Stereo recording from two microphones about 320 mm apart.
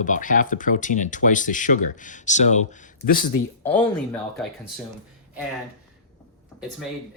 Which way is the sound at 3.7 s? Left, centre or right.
Centre.